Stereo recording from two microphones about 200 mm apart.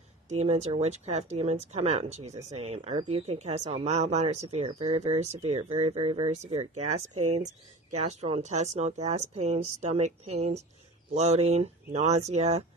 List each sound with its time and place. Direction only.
0.3 s speech: 35° right (ahead or behind)